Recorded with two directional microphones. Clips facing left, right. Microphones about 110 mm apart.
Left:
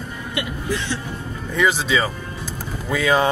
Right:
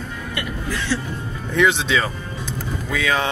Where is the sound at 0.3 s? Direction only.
20° left (ahead or behind).